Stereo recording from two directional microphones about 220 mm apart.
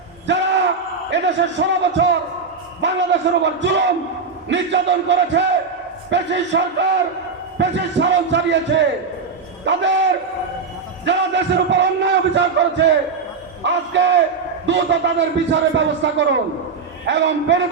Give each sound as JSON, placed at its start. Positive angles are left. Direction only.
{"t": 0.3, "sound": "a sound", "side_deg": -55}
{"t": 1.1, "sound": "a man's voice", "side_deg": -55}
{"t": 9.6, "sound": "a man's voice", "side_deg": -55}